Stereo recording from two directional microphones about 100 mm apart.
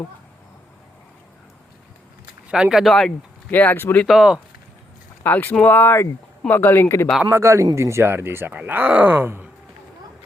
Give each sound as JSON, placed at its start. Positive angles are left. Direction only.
{"t": 2.5, "sound": "speech", "side_deg": -5}
{"t": 3.5, "sound": "speech", "side_deg": 20}
{"t": 4.0, "sound": "speech", "side_deg": -5}
{"t": 5.2, "sound": "speech", "side_deg": 20}
{"t": 7.3, "sound": "speech", "side_deg": -25}